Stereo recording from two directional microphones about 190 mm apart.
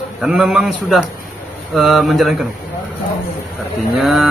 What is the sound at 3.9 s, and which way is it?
Speech, centre (ahead or behind).